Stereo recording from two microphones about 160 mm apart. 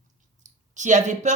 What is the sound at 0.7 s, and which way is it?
Speech, 50° right (ahead or behind).